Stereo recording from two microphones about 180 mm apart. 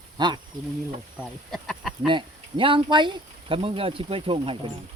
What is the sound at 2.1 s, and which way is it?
Speech, 30° right (ahead or behind).